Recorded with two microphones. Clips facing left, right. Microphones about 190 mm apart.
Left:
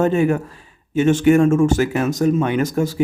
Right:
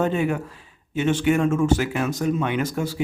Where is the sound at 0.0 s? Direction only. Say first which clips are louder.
Left 6 dB; 45° left (ahead or behind).